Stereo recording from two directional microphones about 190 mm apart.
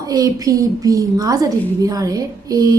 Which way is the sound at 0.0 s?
20° right (ahead or behind).